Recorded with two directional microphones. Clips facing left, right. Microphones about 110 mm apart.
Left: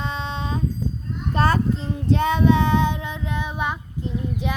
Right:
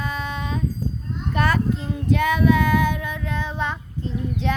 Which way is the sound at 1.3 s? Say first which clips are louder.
Left 1 dB; 30° left (ahead or behind).